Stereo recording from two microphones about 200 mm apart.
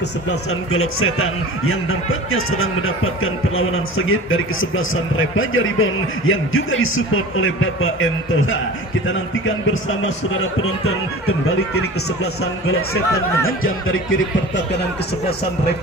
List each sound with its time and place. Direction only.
0.3 s a man's voice: 90° left
12.6 s a man's voice: 90° left